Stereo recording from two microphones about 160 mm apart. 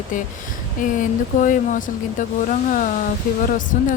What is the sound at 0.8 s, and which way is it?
A woman's voice, 55° left (ahead or behind).